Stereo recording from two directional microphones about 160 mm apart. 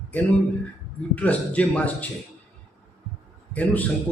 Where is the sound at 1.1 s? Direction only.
10° left (ahead or behind).